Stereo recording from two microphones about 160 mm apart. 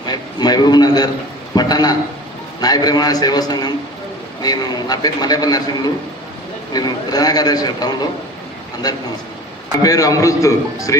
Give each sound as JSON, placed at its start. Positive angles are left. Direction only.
{"t": 0.0, "sound": "a man's voice", "side_deg": 25}